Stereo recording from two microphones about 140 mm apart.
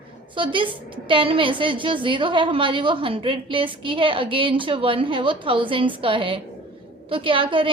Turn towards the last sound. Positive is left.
turn(degrees=-35)  # may be behind; listen again after turning